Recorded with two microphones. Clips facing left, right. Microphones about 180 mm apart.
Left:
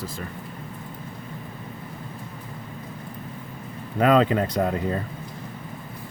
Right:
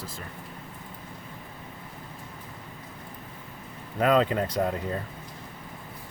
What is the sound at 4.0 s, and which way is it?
Speech, 90° left.